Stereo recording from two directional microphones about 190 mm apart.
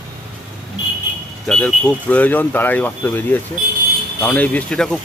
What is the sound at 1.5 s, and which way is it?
Speech, 5° left (ahead or behind).